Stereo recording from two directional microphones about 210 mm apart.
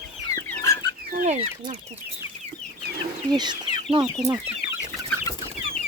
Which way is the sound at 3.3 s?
20° right (ahead or behind).